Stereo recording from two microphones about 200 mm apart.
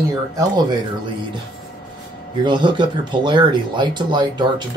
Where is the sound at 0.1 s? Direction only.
20° right (ahead or behind).